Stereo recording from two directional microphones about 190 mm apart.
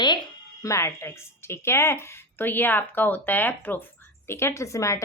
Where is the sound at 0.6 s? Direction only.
15° left (ahead or behind).